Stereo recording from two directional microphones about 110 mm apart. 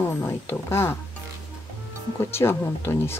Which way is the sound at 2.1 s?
25° left (ahead or behind).